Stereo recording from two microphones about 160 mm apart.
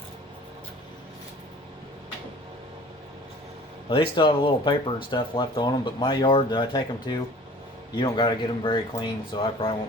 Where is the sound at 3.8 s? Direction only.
30° left (ahead or behind).